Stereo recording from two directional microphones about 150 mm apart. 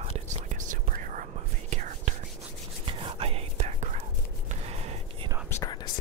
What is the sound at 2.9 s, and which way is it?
Whispering, 35° right (ahead or behind).